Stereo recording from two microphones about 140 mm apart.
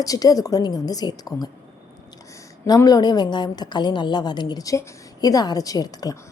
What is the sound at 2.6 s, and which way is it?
A woman's voice, 25° left (ahead or behind).